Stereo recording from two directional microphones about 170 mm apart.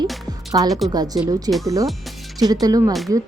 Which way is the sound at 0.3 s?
20° right (ahead or behind).